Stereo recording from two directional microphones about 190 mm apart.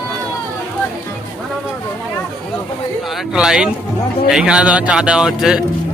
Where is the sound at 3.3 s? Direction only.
5° right (ahead or behind).